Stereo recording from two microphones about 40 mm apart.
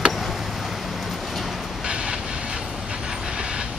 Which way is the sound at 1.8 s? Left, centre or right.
Right.